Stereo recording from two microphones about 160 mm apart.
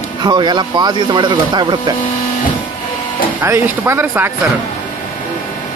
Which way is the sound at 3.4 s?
15° right (ahead or behind).